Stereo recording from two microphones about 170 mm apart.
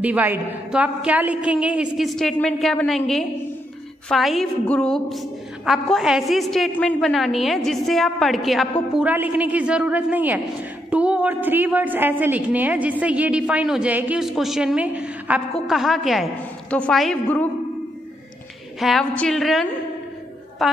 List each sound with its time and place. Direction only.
0.0 s a woman's voice: 10° right (ahead or behind); by 17.5 s 5° left (ahead or behind)
18.8 s a woman's voice: centre (ahead or behind)